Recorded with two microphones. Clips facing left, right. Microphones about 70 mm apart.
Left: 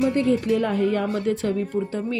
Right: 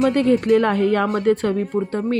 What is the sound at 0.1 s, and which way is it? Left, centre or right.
A woman's voice, right.